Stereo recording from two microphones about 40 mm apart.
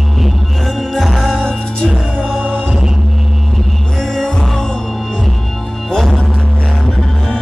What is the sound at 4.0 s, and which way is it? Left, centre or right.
Music, centre.